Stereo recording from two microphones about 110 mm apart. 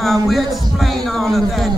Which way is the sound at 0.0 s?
Centre (ahead or behind).